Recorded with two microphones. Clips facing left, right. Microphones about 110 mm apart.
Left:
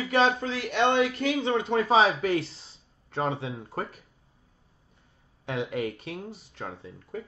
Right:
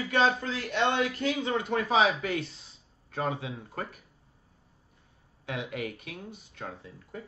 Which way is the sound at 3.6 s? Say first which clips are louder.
Left 4 dB; 30° left (ahead or behind).